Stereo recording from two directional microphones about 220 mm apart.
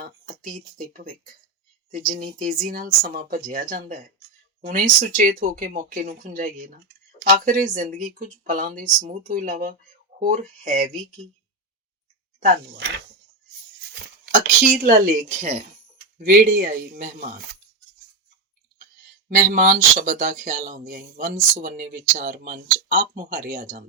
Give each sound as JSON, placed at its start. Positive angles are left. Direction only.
{"t": 0.0, "sound": "speech", "side_deg": -40}
{"t": 12.4, "sound": "speech", "side_deg": -40}
{"t": 14.8, "sound": "speech", "side_deg": -35}
{"t": 19.3, "sound": "speech", "side_deg": -35}